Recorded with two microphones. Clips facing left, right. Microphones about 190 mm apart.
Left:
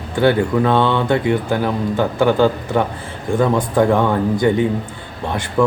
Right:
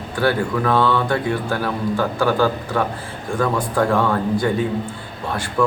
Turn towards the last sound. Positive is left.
turn(degrees=20)  # may be behind; listen again after turning